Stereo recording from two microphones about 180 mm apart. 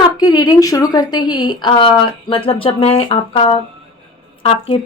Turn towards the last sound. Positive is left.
turn(degrees=30)  # may be behind; listen again after turning